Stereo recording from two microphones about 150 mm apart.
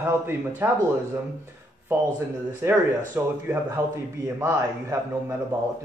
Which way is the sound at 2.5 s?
15° right (ahead or behind).